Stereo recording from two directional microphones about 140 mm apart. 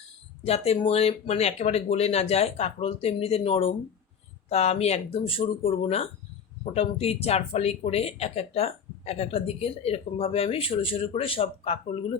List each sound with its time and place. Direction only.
0.4 s speech: 45° left (ahead or behind)